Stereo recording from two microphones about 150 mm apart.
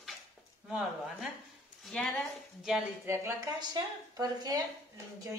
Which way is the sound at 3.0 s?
15° right (ahead or behind).